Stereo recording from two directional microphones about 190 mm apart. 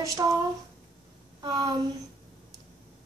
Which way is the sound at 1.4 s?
20° right (ahead or behind).